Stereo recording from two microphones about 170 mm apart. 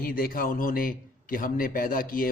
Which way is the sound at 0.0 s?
60° left (ahead or behind).